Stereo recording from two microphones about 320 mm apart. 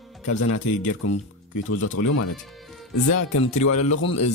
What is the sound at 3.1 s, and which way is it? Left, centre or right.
Speech, left.